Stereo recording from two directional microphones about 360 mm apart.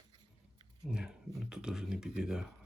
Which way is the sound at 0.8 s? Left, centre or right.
Centre.